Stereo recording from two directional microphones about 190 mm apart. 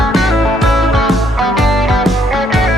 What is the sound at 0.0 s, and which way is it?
Music, centre (ahead or behind).